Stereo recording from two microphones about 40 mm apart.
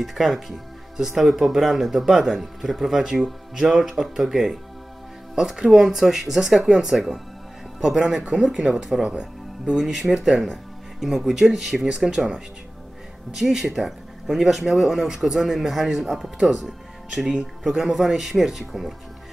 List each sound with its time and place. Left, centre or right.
0.0 s speech: centre
9.1 s music: centre
9.8 s speech: centre
13.3 s speech: centre